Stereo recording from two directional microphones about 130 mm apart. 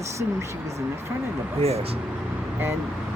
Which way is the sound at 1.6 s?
55° right (ahead or behind).